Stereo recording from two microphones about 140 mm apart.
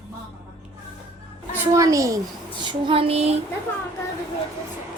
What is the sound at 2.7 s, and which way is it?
Female singing, 40° right (ahead or behind).